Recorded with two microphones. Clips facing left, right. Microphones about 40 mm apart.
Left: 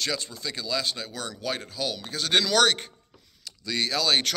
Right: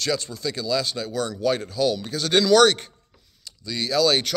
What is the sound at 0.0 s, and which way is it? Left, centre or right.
Speech, left.